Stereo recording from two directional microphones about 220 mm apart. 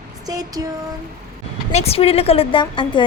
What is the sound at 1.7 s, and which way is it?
A woman's voice, 30° left (ahead or behind).